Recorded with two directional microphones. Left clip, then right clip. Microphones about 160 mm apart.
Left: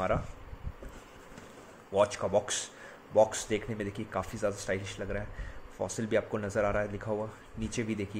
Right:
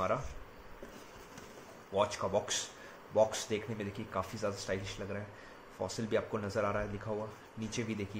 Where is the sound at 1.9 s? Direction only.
25° left (ahead or behind).